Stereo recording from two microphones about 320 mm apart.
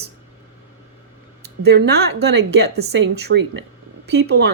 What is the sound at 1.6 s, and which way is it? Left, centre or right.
A woman's voice, right.